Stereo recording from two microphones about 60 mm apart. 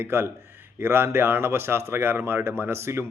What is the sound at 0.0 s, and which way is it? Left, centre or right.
Speech, right.